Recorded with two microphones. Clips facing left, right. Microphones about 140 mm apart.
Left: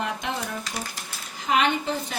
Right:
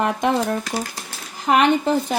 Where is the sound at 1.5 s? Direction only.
65° right (ahead or behind).